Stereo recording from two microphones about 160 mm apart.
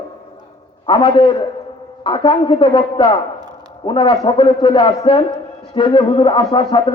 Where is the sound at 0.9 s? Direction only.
30° left (ahead or behind).